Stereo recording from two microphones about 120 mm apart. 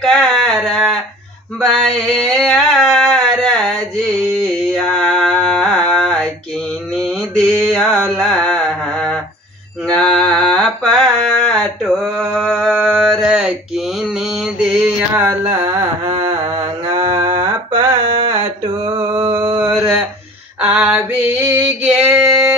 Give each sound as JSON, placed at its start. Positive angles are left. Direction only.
{"t": 0.0, "sound": "a sound", "side_deg": 0}
{"t": 7.0, "sound": "mantra", "side_deg": 5}
{"t": 15.5, "sound": "carnatic music", "side_deg": -25}
{"t": 17.0, "sound": "mantra", "side_deg": -30}
{"t": 18.9, "sound": "mantra", "side_deg": -15}
{"t": 20.6, "sound": "male singing", "side_deg": -15}